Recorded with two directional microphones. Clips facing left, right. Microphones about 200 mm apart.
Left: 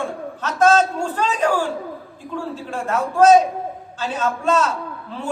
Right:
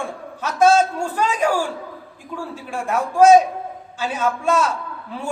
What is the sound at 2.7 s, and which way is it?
A man's voice, 10° right (ahead or behind).